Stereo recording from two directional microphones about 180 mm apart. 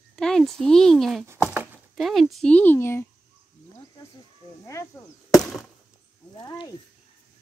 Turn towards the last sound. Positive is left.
turn(degrees=25)  # may be behind; listen again after turning